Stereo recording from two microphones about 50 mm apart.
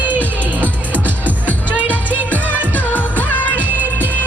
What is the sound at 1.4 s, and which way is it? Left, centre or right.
Music, left.